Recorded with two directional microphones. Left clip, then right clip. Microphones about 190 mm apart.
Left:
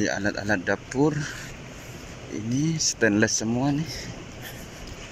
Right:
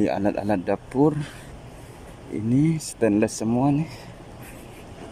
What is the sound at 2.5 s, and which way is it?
Speech, 15° right (ahead or behind).